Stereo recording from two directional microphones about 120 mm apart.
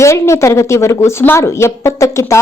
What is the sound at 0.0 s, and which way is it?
Speech, 25° left (ahead or behind).